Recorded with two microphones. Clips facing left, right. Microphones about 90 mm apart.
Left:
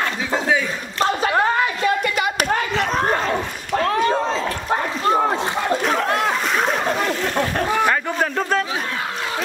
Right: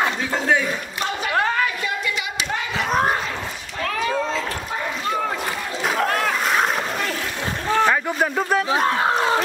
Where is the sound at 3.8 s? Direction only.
40° left (ahead or behind).